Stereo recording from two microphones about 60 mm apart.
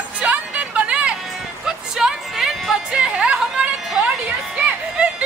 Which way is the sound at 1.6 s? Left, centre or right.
Centre.